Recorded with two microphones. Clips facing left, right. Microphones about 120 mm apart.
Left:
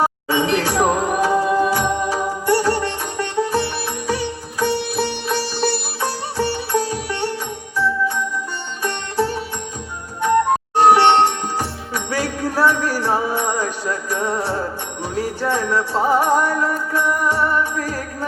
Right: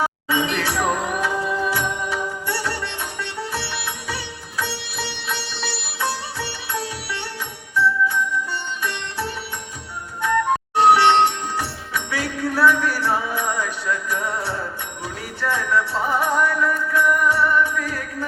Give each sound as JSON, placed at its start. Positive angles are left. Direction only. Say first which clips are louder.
{"t": 0.0, "sound": "music", "louder": "left 3 dB", "side_deg": 40}
{"t": 8.9, "sound": "sitar", "louder": "left 7 dB", "side_deg": 40}
{"t": 10.8, "sound": "music", "louder": "left 2 dB", "side_deg": 40}